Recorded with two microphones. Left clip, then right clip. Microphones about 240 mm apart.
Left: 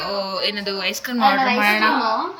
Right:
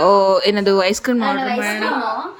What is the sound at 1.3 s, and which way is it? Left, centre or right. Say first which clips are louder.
Speech: left 3 dB; centre.